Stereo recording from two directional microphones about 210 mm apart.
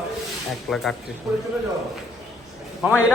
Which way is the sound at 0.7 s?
Centre (ahead or behind).